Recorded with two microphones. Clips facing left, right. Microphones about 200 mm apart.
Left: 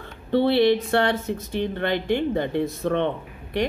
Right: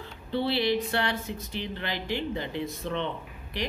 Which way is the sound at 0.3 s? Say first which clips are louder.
Left 8 dB; 60° left (ahead or behind).